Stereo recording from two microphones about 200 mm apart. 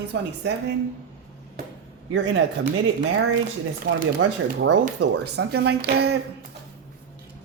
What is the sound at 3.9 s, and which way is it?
A woman's voice, 50° right (ahead or behind).